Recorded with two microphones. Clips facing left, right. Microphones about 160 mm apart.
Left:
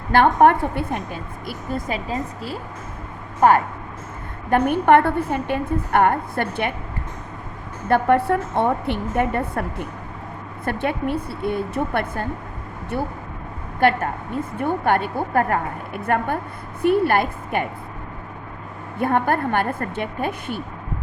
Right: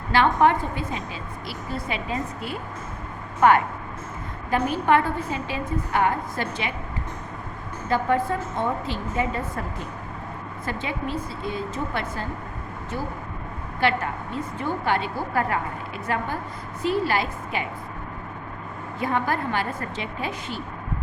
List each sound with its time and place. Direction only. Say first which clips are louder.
0.1 s a woman's voice: left 4 dB; 55° left (ahead or behind)
4.4 s a woman's voice: left 6 dB; 60° left (ahead or behind)
7.9 s a woman's voice: left 5 dB; 60° left (ahead or behind)
13.7 s a woman's voice: left 5 dB; 50° left (ahead or behind)
18.9 s a woman's voice: left 5 dB; 55° left (ahead or behind)